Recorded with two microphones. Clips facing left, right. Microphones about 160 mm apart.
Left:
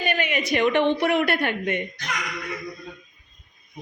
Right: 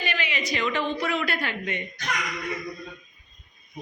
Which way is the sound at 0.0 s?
50° left (ahead or behind).